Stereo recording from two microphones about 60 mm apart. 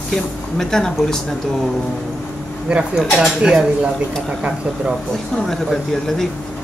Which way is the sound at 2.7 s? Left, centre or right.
Right.